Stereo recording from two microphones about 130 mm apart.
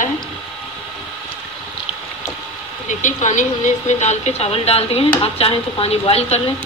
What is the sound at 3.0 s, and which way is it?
A woman's voice, 70° left (ahead or behind).